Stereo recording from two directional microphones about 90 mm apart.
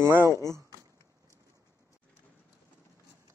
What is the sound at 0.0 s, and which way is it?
Speech, 30° right (ahead or behind).